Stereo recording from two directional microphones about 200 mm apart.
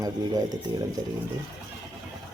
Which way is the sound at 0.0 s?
20° right (ahead or behind).